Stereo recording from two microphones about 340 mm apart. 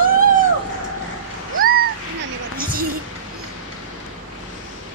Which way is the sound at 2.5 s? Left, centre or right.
Right.